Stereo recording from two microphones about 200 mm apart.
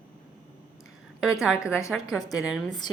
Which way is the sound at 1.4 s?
5° right (ahead or behind).